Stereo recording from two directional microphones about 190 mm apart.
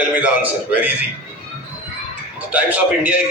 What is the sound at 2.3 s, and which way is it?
Speech, 5° right (ahead or behind).